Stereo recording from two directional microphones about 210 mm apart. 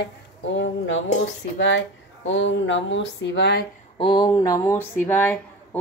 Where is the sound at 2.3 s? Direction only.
60° left (ahead or behind).